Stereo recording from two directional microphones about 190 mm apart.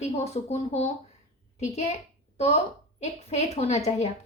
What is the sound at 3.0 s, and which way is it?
A woman's voice, 35° left (ahead or behind).